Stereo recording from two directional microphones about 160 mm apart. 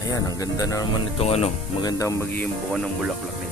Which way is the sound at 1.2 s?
40° left (ahead or behind).